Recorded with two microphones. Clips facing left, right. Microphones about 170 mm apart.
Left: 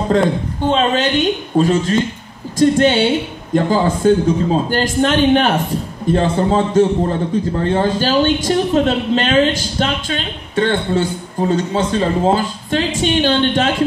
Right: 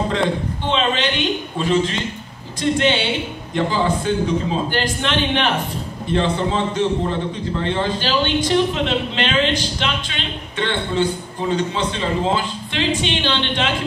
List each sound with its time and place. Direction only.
0.1 s a man's voice: 45° left (ahead or behind)